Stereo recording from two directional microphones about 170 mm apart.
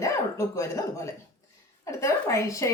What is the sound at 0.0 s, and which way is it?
A woman's voice, 20° left (ahead or behind).